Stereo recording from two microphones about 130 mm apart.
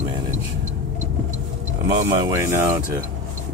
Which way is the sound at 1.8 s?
25° right (ahead or behind).